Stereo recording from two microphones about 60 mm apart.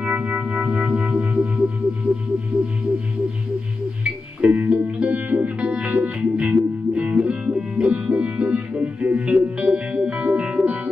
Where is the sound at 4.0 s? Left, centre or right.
Right.